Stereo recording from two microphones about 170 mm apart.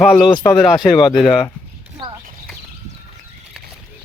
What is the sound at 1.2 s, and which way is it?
Speech, 25° left (ahead or behind).